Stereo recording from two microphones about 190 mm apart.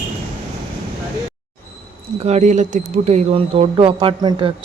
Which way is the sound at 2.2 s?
35° right (ahead or behind).